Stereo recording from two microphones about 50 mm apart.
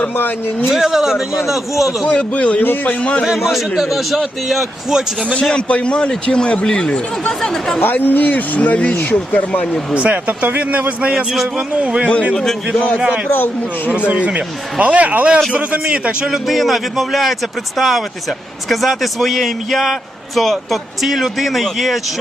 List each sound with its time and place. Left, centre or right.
0.7 s a man's voice: centre
2.0 s a man's voice: left
3.2 s a man's voice: centre
5.4 s a man's voice: centre
7.8 s speech: left
9.9 s a man's voice: right
12.3 s a man's voice: centre
13.0 s a man's voice: right
13.3 s speech: left
14.1 s a man's voice: right
16.3 s a man's voice: centre